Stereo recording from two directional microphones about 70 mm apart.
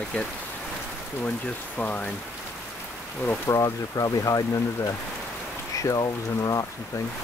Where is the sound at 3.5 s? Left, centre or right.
Left.